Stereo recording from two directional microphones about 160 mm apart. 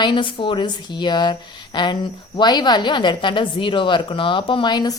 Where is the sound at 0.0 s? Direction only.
30° left (ahead or behind).